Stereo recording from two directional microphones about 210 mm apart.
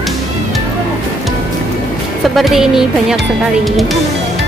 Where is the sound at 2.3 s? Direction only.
Centre (ahead or behind).